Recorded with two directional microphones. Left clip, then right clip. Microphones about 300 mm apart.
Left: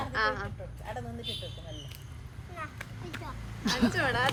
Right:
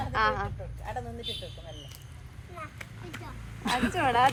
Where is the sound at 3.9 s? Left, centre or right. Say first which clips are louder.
Right 8 dB; centre.